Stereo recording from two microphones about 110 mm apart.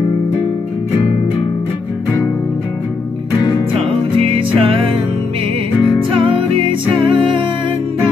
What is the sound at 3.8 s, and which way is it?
Music, 55° right (ahead or behind).